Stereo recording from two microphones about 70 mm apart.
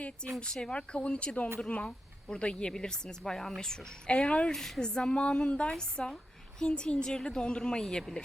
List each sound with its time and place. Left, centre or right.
0.3 s a woman's voice: centre
4.5 s a woman's voice: centre